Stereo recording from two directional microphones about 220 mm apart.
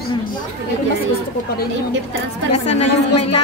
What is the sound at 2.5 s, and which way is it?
Speech, 30° left (ahead or behind).